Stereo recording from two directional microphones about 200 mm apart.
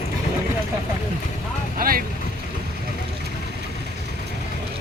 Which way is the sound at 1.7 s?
45° right (ahead or behind).